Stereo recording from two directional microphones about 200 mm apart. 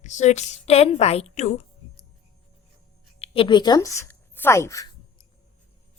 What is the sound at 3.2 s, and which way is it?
Speech, 25° left (ahead or behind).